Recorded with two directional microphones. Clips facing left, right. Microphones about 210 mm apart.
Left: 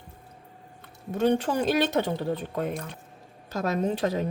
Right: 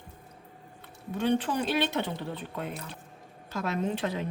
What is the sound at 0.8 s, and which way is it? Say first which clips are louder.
Speech: left 6 dB; 45° left (ahead or behind).